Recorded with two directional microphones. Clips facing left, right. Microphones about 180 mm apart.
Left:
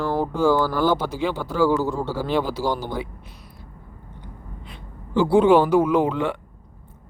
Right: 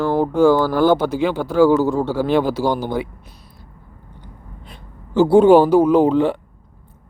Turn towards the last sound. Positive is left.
turn(degrees=-35)  # may be behind; listen again after turning